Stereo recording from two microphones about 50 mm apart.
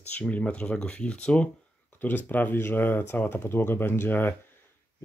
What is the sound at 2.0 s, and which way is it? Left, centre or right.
Speech, left.